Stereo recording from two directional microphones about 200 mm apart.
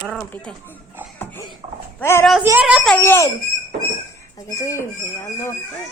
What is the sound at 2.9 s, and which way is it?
Crying, 10° left (ahead or behind).